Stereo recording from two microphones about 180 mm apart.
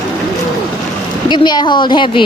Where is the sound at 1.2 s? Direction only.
25° left (ahead or behind).